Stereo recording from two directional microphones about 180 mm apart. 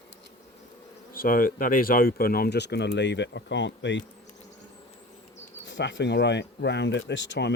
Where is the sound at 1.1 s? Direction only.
50° left (ahead or behind); by 4.0 s 85° left.